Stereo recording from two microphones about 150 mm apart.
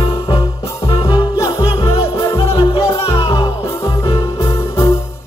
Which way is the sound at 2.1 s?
40° left (ahead or behind).